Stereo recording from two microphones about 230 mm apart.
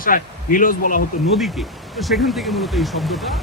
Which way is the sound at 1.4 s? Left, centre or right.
Centre.